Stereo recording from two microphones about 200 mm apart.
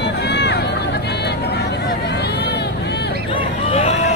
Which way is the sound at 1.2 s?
55° left (ahead or behind).